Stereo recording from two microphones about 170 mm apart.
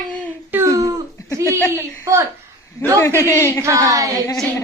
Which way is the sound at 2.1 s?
15° right (ahead or behind).